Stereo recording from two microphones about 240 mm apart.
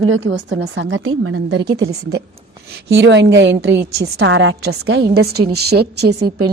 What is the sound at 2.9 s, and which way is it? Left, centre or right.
A woman's voice, right.